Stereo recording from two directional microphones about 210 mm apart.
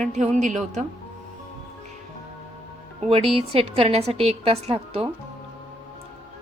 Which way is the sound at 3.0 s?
30° right (ahead or behind).